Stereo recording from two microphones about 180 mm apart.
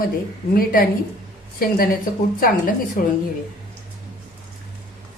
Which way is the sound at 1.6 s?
55° left (ahead or behind).